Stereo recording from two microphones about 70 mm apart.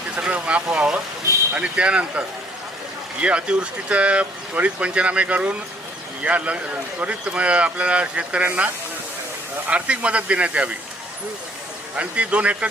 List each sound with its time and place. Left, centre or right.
0.2 s speech: centre
9.6 s speech: centre
11.9 s speech: centre